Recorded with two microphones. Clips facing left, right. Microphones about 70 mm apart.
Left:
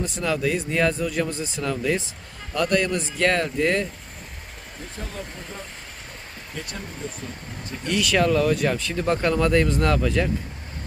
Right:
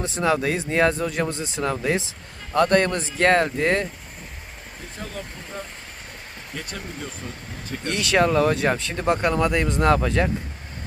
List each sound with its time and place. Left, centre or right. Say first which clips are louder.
0.2 s speech: right 3 dB; right
7.9 s speech: right 1 dB; right
9.2 s speech: left 1 dB; centre